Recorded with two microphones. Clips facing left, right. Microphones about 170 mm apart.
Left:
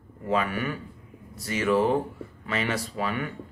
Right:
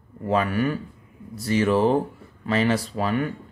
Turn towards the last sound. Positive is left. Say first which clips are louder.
# right 5 dB
turn(degrees=-40)  # may be behind; listen again after turning